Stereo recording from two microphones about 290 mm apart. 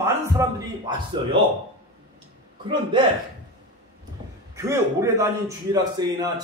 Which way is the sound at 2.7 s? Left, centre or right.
Centre.